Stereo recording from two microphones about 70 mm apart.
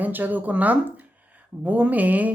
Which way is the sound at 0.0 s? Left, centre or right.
Right.